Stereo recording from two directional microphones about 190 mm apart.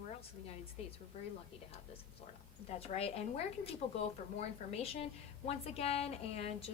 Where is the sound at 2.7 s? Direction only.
30° left (ahead or behind).